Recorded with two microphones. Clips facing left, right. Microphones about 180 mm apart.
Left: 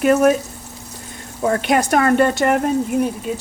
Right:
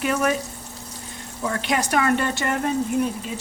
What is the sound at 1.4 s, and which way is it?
Speech, 55° left (ahead or behind).